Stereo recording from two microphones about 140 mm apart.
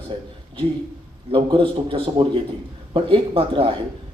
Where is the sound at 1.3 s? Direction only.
40° right (ahead or behind).